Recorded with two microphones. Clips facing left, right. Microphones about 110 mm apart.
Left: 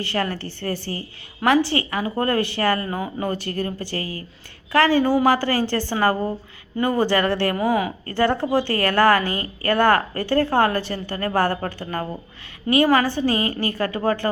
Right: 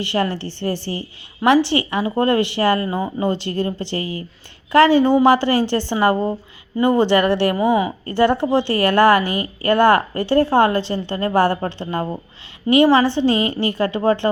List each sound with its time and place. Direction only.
0.0 s a woman's voice: 20° right (ahead or behind)
7.5 s a woman's voice: centre (ahead or behind)
8.0 s a woman's voice: 20° right (ahead or behind)